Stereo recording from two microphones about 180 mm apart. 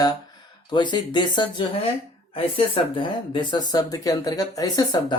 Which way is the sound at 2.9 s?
25° left (ahead or behind).